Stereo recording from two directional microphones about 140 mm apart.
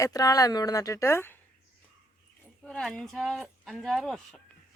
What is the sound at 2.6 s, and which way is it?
A woman's voice, 5° left (ahead or behind).